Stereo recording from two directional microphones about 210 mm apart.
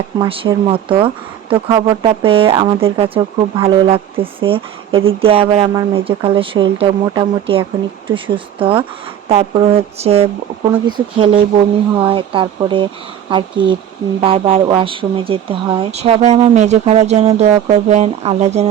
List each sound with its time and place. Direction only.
0.2 s speech: 20° right (ahead or behind)
10.0 s speech: 30° right (ahead or behind)